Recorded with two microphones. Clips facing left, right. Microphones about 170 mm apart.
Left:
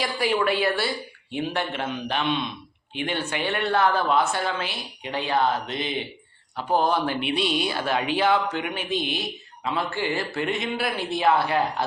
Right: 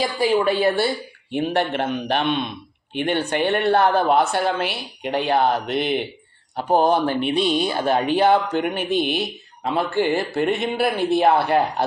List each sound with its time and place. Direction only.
0.0 s a woman's voice: 30° right (ahead or behind)
1.3 s a woman's voice: 55° right (ahead or behind)
7.1 s a man's voice: 45° right (ahead or behind)